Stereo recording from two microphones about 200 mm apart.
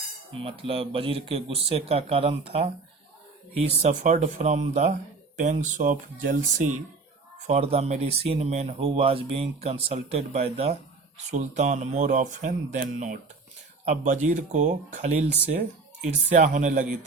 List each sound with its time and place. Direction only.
0.4 s speech: 25° right (ahead or behind)
3.8 s speech: 35° right (ahead or behind)